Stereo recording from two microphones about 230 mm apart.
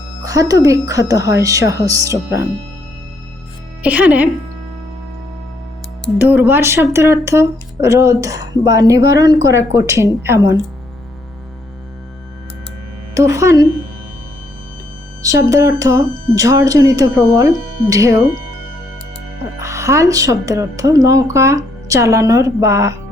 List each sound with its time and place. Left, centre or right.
0.2 s music: centre
0.6 s speech: centre
3.8 s speech: centre
6.1 s speech: centre
13.1 s speech: centre
15.2 s speech: centre
19.5 s speech: centre